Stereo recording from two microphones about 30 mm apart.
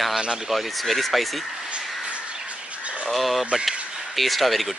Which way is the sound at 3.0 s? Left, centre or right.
Centre.